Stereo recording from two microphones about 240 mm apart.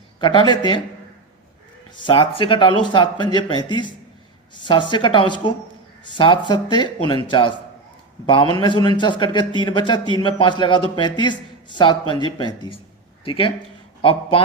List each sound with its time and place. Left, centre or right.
0.2 s a man's voice: centre
2.0 s a man's voice: left
8.5 s a man's voice: centre